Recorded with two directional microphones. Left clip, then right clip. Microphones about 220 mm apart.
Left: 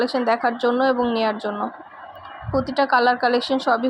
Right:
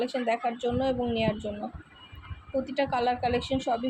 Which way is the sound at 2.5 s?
20° left (ahead or behind).